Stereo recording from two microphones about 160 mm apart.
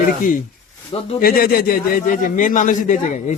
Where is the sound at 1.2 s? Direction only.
65° left (ahead or behind).